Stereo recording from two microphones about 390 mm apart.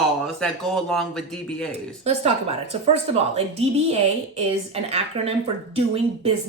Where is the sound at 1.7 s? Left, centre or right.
Centre.